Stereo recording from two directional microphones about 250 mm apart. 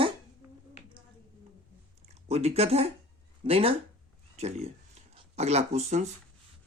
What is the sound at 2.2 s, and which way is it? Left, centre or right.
Speech, right.